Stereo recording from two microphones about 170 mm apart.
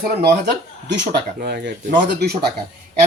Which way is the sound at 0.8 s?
85° right.